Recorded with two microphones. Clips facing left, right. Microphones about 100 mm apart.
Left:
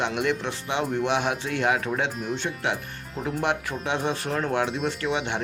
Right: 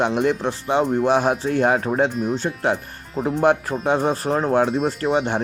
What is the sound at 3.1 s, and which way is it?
Speech, 40° right (ahead or behind).